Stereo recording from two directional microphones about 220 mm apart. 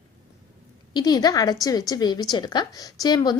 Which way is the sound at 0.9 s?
20° left (ahead or behind).